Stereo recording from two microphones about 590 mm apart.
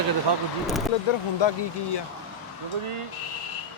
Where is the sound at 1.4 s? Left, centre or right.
Left.